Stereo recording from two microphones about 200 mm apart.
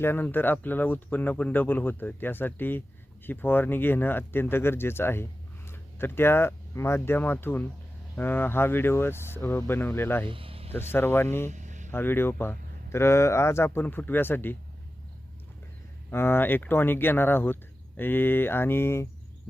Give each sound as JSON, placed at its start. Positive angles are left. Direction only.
{"t": 0.0, "sound": "speech", "side_deg": 10}
{"t": 10.2, "sound": "speech", "side_deg": -25}
{"t": 10.7, "sound": "speech", "side_deg": 10}
{"t": 11.5, "sound": "vehicle", "side_deg": -40}
{"t": 11.9, "sound": "speech", "side_deg": 10}
{"t": 16.0, "sound": "speech", "side_deg": 10}